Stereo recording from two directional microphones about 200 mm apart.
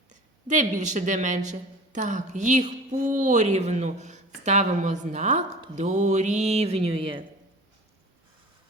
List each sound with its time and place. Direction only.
0.4 s a woman's voice: 40° right (ahead or behind)